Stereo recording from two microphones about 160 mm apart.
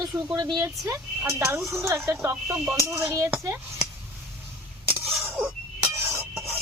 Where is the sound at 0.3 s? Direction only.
25° right (ahead or behind).